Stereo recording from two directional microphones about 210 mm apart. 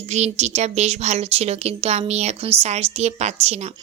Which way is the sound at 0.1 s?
30° right (ahead or behind).